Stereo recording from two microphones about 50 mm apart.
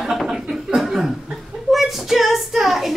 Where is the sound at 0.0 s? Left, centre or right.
Centre.